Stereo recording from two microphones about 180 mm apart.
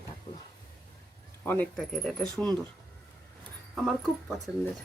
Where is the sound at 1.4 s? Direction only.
10° left (ahead or behind).